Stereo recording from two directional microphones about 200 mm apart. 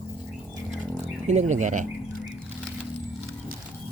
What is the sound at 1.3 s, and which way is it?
Speech, 35° right (ahead or behind).